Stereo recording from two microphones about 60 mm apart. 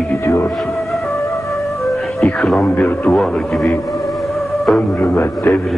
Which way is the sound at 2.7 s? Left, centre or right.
Left.